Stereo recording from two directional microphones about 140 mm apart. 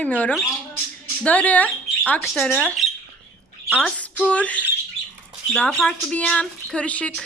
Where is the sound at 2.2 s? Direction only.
Centre (ahead or behind).